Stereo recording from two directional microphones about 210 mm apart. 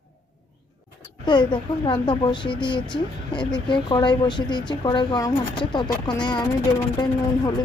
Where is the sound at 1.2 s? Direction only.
20° left (ahead or behind).